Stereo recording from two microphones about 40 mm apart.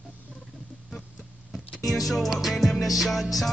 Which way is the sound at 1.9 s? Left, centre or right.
Centre.